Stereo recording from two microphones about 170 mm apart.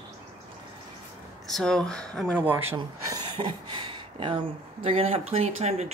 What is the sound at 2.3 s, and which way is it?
Speech, 10° right (ahead or behind).